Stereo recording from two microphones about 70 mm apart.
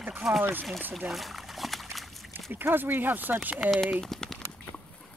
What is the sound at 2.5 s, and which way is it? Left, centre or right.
Speech, right.